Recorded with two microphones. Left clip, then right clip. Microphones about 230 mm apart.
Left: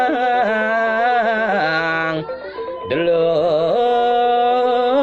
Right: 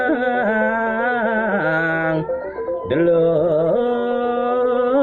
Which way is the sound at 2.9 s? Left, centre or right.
Left.